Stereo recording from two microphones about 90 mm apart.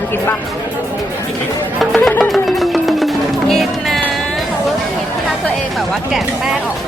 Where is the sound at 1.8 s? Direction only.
Centre (ahead or behind).